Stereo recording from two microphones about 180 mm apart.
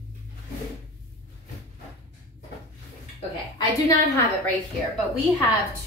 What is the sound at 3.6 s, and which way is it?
Speech, 20° left (ahead or behind).